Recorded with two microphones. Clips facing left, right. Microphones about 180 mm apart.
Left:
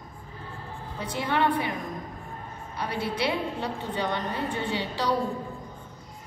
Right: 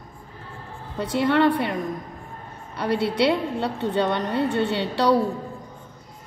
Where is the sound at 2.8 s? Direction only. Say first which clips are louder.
Right 8 dB; 65° right (ahead or behind).